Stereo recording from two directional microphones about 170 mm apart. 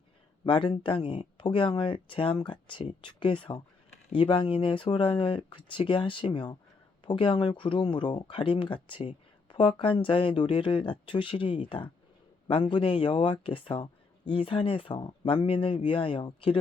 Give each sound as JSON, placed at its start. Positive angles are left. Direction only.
{"t": 0.4, "sound": "speech", "side_deg": 30}